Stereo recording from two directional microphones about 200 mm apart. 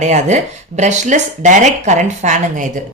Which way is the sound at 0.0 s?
35° right (ahead or behind).